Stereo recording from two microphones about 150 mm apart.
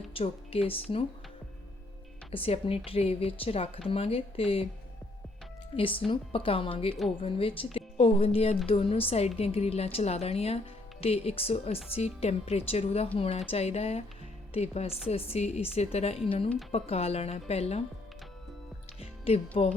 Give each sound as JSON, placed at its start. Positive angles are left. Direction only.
{"t": 0.1, "sound": "speech", "side_deg": 40}
{"t": 2.3, "sound": "a woman's voice", "side_deg": 40}
{"t": 5.7, "sound": "a woman's voice", "side_deg": 35}
{"t": 18.9, "sound": "music", "side_deg": 40}